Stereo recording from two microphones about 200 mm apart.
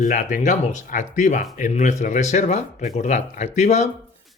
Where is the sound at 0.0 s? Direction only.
40° left (ahead or behind).